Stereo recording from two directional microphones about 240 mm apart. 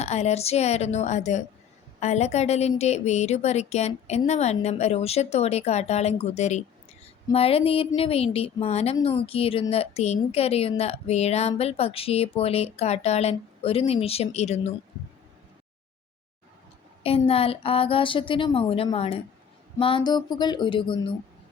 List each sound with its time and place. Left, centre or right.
0.0 s speech: left
17.0 s speech: left